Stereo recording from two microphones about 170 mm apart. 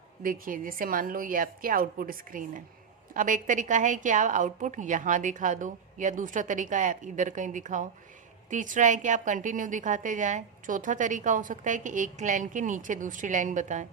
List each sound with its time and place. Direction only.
0.2 s a woman's voice: 55° right (ahead or behind)